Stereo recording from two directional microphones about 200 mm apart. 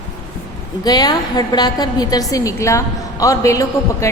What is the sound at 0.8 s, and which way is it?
A woman's voice, 20° left (ahead or behind).